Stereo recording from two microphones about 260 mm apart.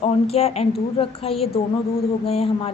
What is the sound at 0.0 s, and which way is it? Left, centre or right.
A woman's voice, left.